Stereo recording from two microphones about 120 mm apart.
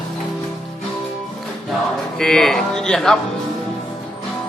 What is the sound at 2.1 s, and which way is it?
Speech, 5° left (ahead or behind).